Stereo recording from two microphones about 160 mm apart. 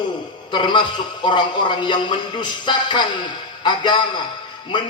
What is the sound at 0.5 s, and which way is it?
A man's voice, 30° left (ahead or behind).